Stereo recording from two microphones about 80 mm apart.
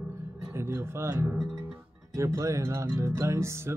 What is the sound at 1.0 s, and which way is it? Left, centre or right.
Speech, right.